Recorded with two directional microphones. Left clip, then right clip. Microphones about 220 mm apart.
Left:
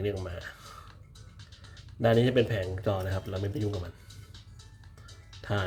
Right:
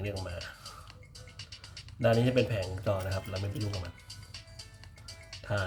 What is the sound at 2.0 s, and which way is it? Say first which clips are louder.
Speech: left 2 dB; 20° left (ahead or behind).